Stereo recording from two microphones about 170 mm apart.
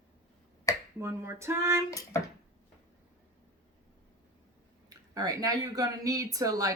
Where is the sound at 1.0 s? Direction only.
15° right (ahead or behind).